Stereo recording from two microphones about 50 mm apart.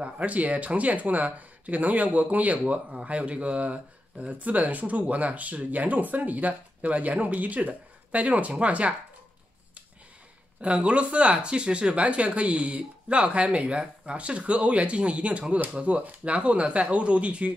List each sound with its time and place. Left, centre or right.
0.0 s speech: right
10.6 s speech: right